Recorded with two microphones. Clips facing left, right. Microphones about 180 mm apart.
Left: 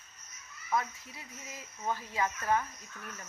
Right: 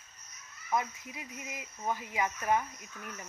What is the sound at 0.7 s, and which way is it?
Speech, 15° right (ahead or behind).